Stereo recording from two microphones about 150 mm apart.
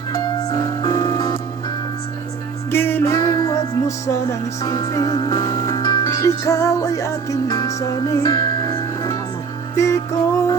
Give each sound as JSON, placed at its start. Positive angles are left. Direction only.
{"t": 0.5, "sound": "music", "side_deg": 25}
{"t": 2.6, "sound": "music", "side_deg": 15}